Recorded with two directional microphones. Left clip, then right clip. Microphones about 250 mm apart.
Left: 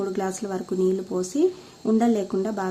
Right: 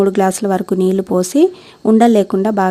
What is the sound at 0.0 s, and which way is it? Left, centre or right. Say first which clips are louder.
Speech: right 14 dB; right.